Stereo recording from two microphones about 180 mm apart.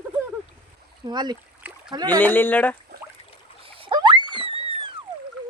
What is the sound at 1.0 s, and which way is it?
Speech, 25° right (ahead or behind).